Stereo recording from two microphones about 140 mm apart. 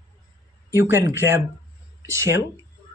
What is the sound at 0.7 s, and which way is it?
Speech, 15° right (ahead or behind).